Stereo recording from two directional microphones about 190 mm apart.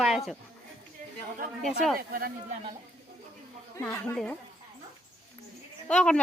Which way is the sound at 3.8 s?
5° left (ahead or behind).